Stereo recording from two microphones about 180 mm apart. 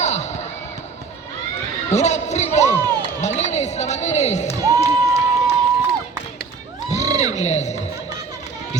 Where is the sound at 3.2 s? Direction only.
40° left (ahead or behind).